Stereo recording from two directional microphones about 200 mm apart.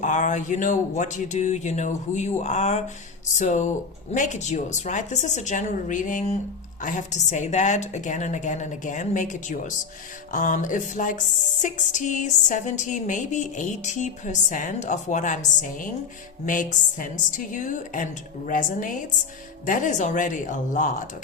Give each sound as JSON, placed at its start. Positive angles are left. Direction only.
{"t": 0.0, "sound": "music", "side_deg": 40}